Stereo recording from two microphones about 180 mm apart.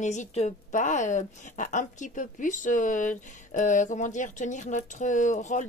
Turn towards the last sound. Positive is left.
turn(degrees=45)  # may be behind; listen again after turning